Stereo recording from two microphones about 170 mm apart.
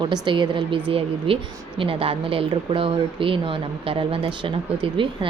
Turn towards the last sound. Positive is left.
turn(degrees=-30)  # may be behind; listen again after turning